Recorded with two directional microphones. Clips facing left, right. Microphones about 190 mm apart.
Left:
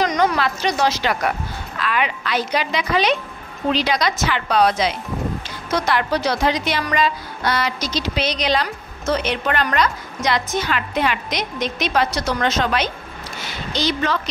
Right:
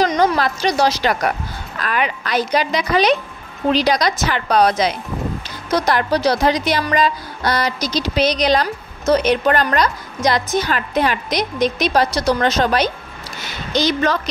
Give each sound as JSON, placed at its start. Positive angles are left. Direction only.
{"t": 0.0, "sound": "a woman's voice", "side_deg": -35}